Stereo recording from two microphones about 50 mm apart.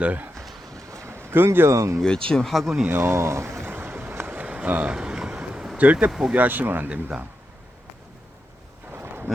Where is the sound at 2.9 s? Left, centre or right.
Right.